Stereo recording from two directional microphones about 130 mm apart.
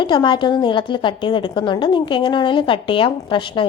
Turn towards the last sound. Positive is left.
turn(degrees=40)  # may be behind; listen again after turning